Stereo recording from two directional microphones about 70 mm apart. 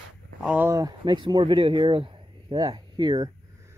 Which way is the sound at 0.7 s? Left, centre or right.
Right.